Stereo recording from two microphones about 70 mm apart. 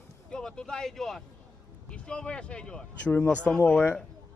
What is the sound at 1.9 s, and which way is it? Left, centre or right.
Speech, centre.